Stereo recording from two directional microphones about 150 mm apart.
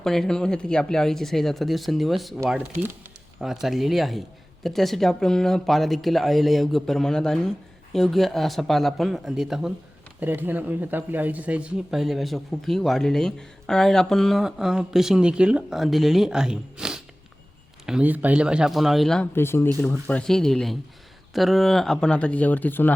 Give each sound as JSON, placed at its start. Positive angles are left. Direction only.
{"t": 0.0, "sound": "speech", "side_deg": 5}
{"t": 3.4, "sound": "speech", "side_deg": 0}
{"t": 19.3, "sound": "speech", "side_deg": 15}